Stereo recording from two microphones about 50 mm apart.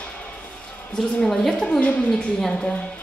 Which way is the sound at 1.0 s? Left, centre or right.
Centre.